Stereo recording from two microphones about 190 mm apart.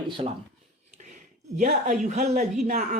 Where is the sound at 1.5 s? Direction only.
40° right (ahead or behind).